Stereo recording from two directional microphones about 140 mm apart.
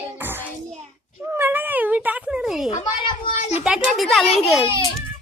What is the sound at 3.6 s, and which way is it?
A child's voice, centre (ahead or behind).